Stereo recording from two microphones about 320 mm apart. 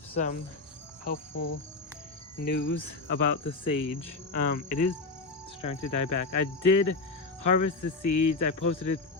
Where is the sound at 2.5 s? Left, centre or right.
Left.